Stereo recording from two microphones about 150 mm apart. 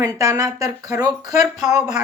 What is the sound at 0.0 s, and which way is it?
Speech, 20° right (ahead or behind).